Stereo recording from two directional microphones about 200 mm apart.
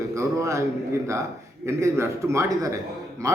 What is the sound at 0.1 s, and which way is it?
Speech, 15° right (ahead or behind).